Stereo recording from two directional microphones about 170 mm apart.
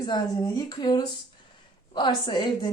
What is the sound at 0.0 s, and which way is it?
A woman's voice, 25° left (ahead or behind).